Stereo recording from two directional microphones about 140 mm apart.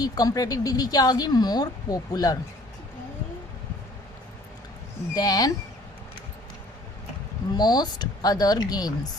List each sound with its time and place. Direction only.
0.0 s speech: 25° left (ahead or behind)
5.1 s speech: 25° left (ahead or behind)
7.5 s speech: 30° left (ahead or behind)